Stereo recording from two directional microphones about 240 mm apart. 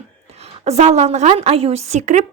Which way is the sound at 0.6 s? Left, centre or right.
Right.